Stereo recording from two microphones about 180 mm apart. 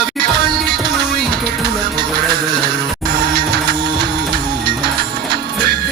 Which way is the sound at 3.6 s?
65° right (ahead or behind).